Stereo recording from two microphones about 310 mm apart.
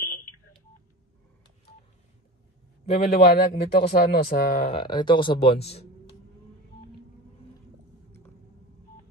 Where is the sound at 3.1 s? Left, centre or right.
Left.